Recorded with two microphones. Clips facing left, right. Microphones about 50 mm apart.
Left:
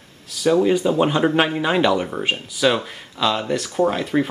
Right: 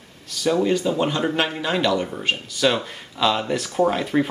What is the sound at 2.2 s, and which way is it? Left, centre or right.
Speech, centre.